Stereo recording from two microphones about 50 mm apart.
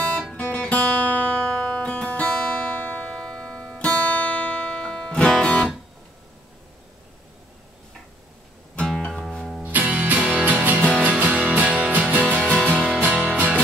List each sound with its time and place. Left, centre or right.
0.3 s music: centre
3.1 s music: centre
8.8 s music: centre
9.6 s music: right
12.4 s music: left
13.0 s music: right